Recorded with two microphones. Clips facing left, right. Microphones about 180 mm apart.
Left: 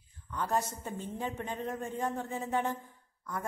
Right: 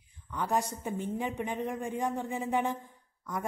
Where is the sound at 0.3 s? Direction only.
15° right (ahead or behind).